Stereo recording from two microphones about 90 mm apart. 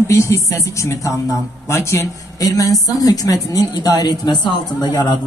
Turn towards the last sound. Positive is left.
turn(degrees=50)  # may be behind; listen again after turning